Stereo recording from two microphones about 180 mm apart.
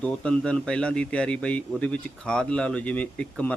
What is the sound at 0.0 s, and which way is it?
A man's voice, 5° left (ahead or behind).